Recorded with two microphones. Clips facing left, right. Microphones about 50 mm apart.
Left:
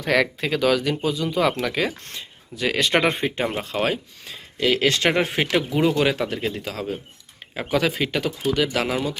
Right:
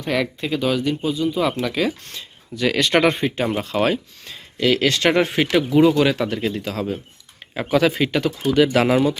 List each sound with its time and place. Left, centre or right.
0.0 s speech: left
1.6 s speech: left
2.6 s speech: centre
3.4 s speech: centre
8.5 s speech: centre